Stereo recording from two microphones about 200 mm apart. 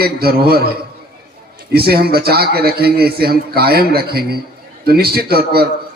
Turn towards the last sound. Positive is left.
turn(degrees=-50)  # may be behind; listen again after turning